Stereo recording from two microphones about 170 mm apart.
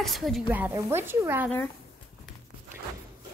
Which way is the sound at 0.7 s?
15° right (ahead or behind).